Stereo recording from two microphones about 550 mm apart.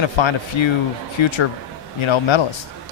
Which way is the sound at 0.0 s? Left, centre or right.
Left.